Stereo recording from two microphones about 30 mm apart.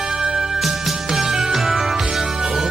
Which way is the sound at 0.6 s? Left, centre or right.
Centre.